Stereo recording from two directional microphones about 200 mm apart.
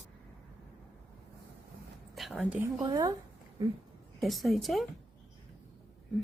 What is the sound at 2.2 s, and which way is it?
Speech, centre (ahead or behind).